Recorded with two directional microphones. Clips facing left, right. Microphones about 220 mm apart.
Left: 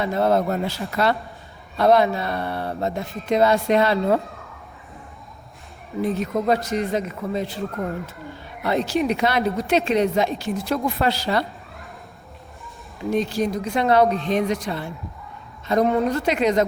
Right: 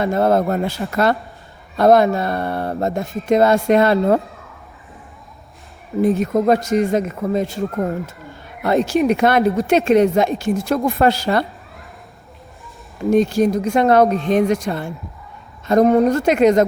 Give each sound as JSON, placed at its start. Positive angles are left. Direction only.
{"t": 0.0, "sound": "speech", "side_deg": -50}
{"t": 6.0, "sound": "speech", "side_deg": -45}
{"t": 13.1, "sound": "speech", "side_deg": -45}